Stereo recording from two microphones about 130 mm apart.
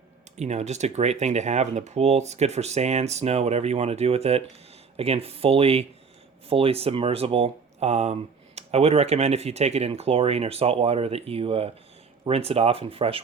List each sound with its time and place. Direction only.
0.3 s speech: 60° right (ahead or behind)